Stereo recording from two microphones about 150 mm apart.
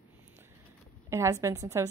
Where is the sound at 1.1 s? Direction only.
20° right (ahead or behind).